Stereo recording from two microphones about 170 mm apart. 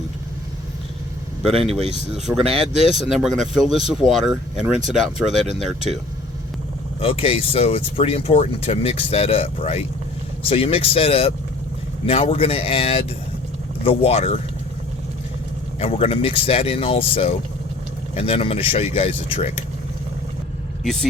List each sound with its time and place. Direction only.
1.5 s speech: centre (ahead or behind)
7.0 s speech: 35° left (ahead or behind)
15.8 s speech: 35° left (ahead or behind)
20.8 s speech: centre (ahead or behind)